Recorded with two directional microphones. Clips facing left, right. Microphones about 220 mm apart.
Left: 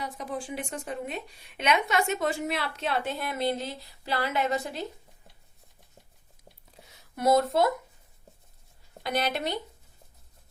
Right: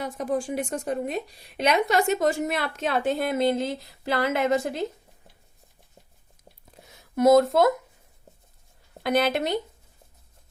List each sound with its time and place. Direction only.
0.0 s a woman's voice: 50° right (ahead or behind)
7.2 s a woman's voice: 45° right (ahead or behind)
9.0 s a woman's voice: 50° right (ahead or behind)